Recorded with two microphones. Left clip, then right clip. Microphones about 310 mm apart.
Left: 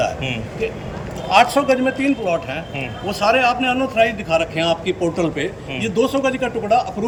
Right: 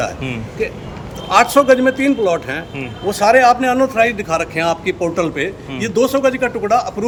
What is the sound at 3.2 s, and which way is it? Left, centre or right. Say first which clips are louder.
A man's voice: right 5 dB; right.